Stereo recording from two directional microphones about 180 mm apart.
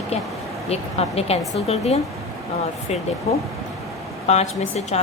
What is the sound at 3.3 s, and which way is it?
A woman's voice, 35° left (ahead or behind).